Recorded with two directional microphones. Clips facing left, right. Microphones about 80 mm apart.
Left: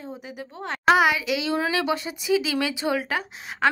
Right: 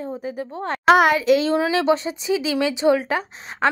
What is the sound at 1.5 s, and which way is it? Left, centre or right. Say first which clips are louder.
Speech: right 5 dB; right.